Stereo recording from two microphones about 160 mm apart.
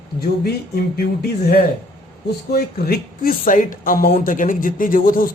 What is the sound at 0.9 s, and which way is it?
Music, 85° left.